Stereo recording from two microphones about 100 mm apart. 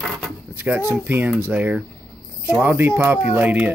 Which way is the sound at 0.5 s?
20° right (ahead or behind).